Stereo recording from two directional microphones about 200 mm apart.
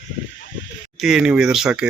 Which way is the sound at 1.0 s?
5° right (ahead or behind).